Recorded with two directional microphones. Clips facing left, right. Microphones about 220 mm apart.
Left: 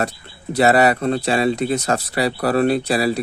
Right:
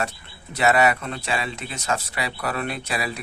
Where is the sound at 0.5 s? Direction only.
35° left (ahead or behind).